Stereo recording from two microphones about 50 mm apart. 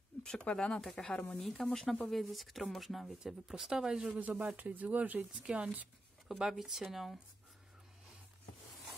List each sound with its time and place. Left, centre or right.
0.2 s a sound: centre
0.6 s speech: centre
4.1 s speech: right
6.2 s speech: centre